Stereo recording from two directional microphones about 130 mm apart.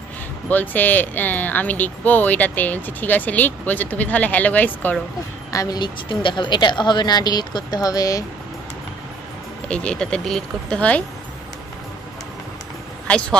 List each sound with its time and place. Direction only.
0.5 s speech: 15° left (ahead or behind)
5.5 s a woman's voice: 30° left (ahead or behind)
9.7 s speech: 10° left (ahead or behind)
13.0 s speech: 10° left (ahead or behind)